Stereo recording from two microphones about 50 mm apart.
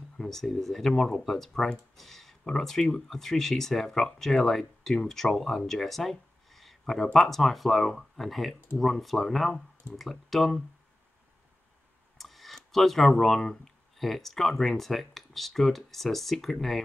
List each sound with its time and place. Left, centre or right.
0.3 s speech: centre
12.2 s a sound: centre
13.9 s speech: centre